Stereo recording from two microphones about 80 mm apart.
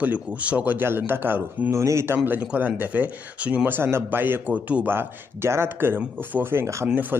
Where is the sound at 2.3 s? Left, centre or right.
Centre.